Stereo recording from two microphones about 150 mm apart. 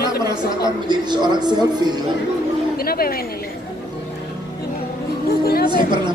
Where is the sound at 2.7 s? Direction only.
85° left.